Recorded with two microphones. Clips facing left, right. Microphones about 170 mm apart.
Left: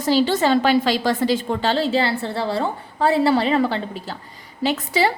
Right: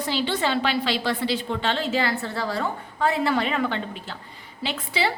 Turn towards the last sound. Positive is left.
turn(degrees=40)  # may be behind; listen again after turning